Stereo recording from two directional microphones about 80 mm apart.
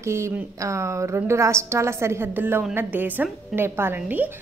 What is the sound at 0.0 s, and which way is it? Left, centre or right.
A woman's voice, right.